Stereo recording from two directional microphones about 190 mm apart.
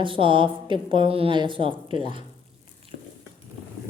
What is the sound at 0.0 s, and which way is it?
A woman's voice, 25° right (ahead or behind).